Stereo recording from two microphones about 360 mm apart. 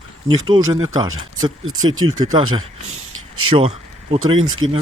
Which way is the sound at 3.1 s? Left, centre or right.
Right.